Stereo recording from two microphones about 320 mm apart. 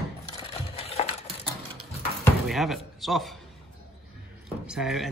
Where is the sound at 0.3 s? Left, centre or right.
Centre.